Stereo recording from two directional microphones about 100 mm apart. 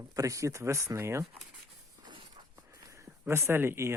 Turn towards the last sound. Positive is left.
turn(degrees=-25)  # may be behind; listen again after turning